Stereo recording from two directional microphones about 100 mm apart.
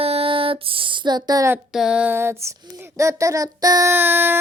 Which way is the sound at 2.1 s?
25° right (ahead or behind).